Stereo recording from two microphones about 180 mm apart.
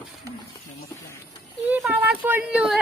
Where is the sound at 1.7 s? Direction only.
10° right (ahead or behind).